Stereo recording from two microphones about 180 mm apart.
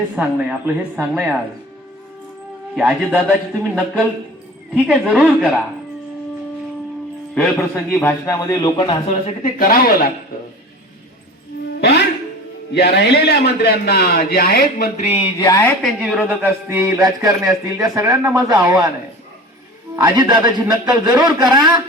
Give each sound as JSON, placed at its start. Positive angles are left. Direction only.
{"t": 0.2, "sound": "a man's voice", "side_deg": -10}
{"t": 2.7, "sound": "a man's voice", "side_deg": -5}
{"t": 7.3, "sound": "a man's voice", "side_deg": 10}
{"t": 9.0, "sound": "speech", "side_deg": 45}
{"t": 11.7, "sound": "music", "side_deg": 70}
{"t": 12.7, "sound": "a man's voice", "side_deg": 70}
{"t": 14.9, "sound": "speech", "side_deg": 35}
{"t": 15.4, "sound": "a man's voice", "side_deg": 15}
{"t": 15.8, "sound": "a man's voice", "side_deg": 0}
{"t": 20.0, "sound": "a man's voice", "side_deg": -25}